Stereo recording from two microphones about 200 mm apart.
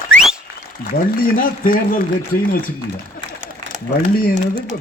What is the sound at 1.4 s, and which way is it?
A man's voice, 45° left (ahead or behind).